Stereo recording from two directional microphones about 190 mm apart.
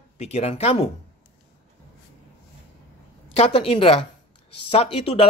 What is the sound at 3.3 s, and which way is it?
A woman's voice, 30° left (ahead or behind).